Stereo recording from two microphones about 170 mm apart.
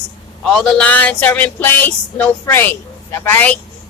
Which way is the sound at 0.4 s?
Centre (ahead or behind).